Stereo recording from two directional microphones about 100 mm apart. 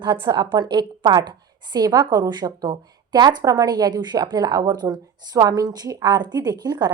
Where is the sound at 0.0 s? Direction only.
55° right (ahead or behind).